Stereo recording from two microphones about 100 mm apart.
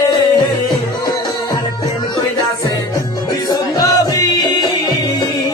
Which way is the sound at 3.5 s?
40° left (ahead or behind).